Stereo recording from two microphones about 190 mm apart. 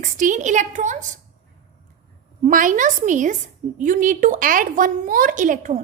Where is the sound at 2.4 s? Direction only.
45° right (ahead or behind).